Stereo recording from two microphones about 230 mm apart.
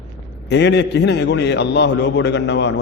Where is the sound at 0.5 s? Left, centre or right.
Left.